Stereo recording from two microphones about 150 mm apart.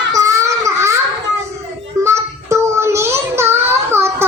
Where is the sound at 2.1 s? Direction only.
20° right (ahead or behind).